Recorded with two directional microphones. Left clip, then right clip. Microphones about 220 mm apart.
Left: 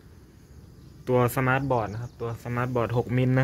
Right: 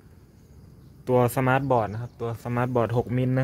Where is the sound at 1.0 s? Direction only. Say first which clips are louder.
Right 2 dB; 20° right (ahead or behind).